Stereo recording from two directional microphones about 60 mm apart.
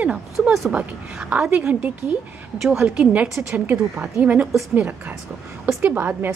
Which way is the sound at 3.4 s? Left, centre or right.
Right.